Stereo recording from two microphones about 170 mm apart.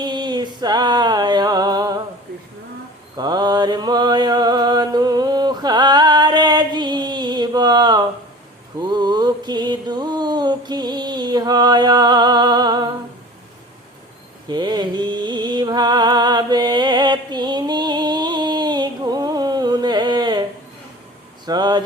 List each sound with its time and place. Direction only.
0.0 s music: 25° right (ahead or behind)
3.2 s mantra: 25° right (ahead or behind)
14.5 s music: 25° right (ahead or behind)
21.4 s a sound: 25° right (ahead or behind)